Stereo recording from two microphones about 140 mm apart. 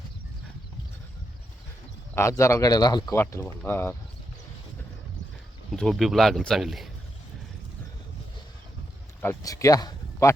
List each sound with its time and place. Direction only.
2.1 s speech: 20° left (ahead or behind)
3.2 s speech: 15° left (ahead or behind)
5.7 s speech: 5° left (ahead or behind)
9.2 s speech: 25° left (ahead or behind)